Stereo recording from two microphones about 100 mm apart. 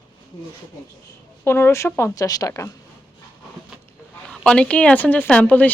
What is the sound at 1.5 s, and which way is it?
A woman's voice, 25° left (ahead or behind).